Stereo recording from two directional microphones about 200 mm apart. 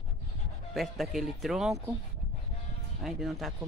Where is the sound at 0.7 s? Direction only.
Centre (ahead or behind).